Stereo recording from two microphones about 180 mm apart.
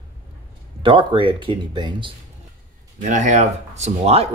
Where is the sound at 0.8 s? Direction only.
30° right (ahead or behind).